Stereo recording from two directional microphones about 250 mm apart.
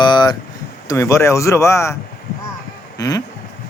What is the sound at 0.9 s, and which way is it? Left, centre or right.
Speech, centre.